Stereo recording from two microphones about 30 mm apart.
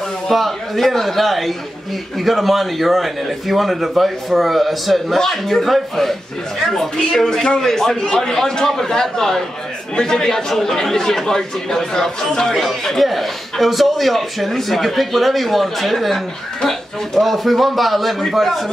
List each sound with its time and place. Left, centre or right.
0.3 s a man's voice: centre
5.2 s speech: centre
7.0 s a man's voice: centre
13.0 s a man's voice: centre